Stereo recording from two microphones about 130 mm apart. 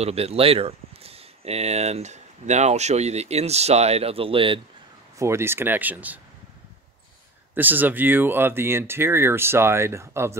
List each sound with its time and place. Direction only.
0.0 s speech: 50° right (ahead or behind)
5.2 s speech: 20° right (ahead or behind)
7.5 s speech: 15° right (ahead or behind)